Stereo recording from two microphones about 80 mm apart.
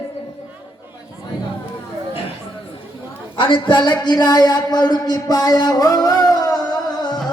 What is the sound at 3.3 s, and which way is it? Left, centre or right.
Speech, left.